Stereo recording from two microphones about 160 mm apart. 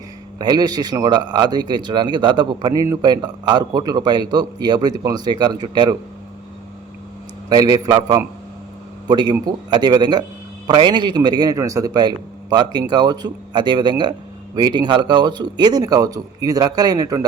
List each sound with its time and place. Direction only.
0.3 s speech: 25° right (ahead or behind)
7.5 s a man's voice: 25° right (ahead or behind)